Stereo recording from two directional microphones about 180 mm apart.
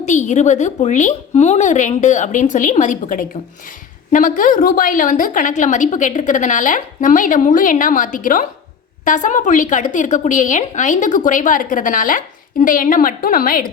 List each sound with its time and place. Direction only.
0.0 s a woman's voice: 40° left (ahead or behind)